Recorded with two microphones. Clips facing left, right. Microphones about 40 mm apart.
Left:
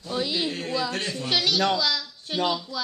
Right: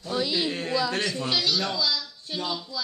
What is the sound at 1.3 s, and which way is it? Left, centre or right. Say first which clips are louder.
A man's voice: left 6 dB; left.